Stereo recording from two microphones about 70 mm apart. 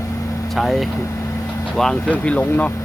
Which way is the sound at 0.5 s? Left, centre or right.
Centre.